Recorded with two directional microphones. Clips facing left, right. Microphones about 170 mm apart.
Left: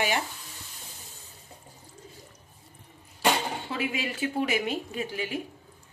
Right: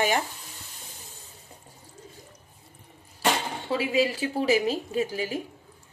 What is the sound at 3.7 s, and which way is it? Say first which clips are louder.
Speech: right 11 dB; 35° right (ahead or behind).